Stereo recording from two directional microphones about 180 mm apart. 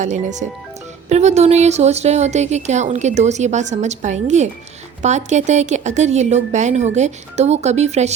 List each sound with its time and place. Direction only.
0.0 s speech: 40° right (ahead or behind)